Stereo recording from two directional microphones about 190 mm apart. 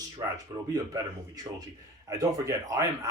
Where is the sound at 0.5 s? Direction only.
20° right (ahead or behind).